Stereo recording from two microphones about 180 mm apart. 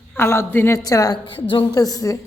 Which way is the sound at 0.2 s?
15° left (ahead or behind).